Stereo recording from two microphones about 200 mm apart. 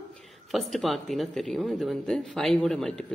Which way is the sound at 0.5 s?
Centre (ahead or behind).